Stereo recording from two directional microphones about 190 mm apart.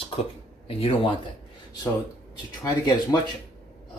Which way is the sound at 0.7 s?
30° left (ahead or behind).